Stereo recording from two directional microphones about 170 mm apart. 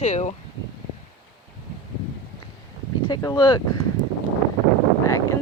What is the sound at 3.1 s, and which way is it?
Speech, 20° left (ahead or behind).